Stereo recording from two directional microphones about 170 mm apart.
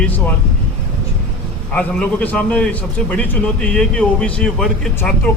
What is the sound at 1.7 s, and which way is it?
A man's voice, 10° left (ahead or behind).